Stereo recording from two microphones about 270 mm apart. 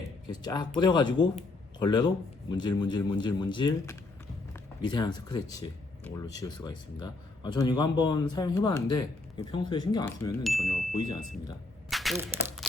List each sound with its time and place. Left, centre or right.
0.3 s speech: centre
10.4 s speech: centre
11.9 s a sound: centre